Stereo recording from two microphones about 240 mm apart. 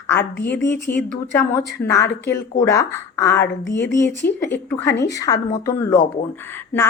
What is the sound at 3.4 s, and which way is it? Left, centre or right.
Speech, left.